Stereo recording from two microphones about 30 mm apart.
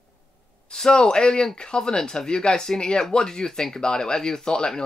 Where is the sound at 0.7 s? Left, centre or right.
Left.